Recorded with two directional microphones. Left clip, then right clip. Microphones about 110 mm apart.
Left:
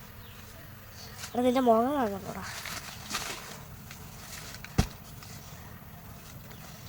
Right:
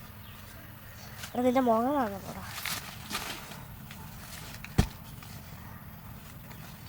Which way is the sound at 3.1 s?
5° right (ahead or behind).